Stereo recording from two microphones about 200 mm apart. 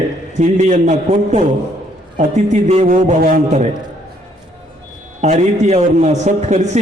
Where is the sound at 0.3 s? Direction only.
35° right (ahead or behind).